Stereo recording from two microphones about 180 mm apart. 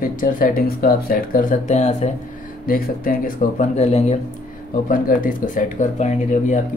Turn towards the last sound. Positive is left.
turn(degrees=40)  # may be behind; listen again after turning